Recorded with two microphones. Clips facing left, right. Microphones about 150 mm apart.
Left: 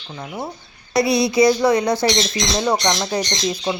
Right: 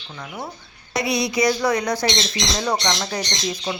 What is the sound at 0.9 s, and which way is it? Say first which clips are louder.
Speech: left 6 dB; 30° left (ahead or behind).